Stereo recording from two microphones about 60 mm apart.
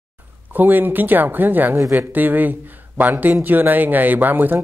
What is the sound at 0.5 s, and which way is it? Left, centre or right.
A man's voice, right.